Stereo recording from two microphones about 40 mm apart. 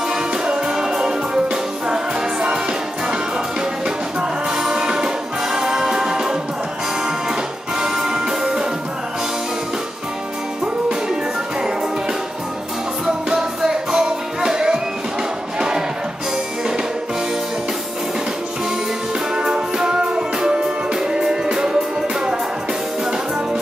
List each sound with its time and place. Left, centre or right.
0.3 s music: centre
3.8 s music: centre
7.8 s music: centre
13.0 s music: centre
19.3 s music: centre